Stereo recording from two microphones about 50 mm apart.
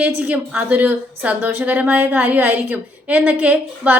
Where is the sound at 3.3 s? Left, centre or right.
Right.